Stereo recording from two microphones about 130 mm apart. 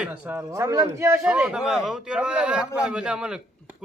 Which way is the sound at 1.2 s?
5° right (ahead or behind).